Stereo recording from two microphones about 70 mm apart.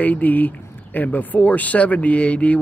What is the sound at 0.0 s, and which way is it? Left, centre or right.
Speech, left.